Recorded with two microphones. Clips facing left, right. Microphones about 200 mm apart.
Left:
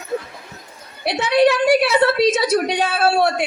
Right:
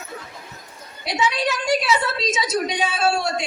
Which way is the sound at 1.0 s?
60° left (ahead or behind).